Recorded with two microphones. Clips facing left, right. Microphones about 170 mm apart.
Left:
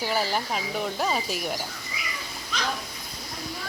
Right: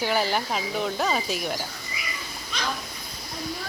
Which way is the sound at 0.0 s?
Centre (ahead or behind).